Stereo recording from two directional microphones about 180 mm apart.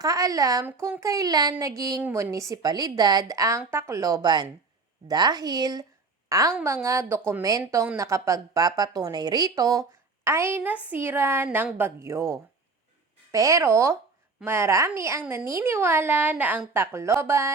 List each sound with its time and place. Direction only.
0.0 s a woman's voice: 20° right (ahead or behind)